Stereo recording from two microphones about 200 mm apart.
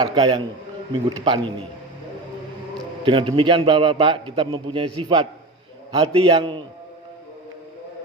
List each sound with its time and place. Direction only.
0.0 s a man's voice: 25° right (ahead or behind)
3.0 s a man's voice: 25° right (ahead or behind)